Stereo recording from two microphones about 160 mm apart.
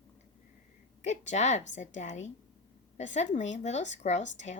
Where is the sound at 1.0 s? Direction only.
45° left (ahead or behind).